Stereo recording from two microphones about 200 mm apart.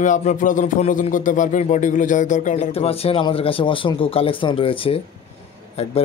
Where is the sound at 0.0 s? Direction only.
40° left (ahead or behind).